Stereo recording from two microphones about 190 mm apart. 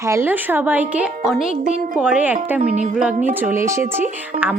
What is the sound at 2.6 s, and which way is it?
Speech, 40° right (ahead or behind).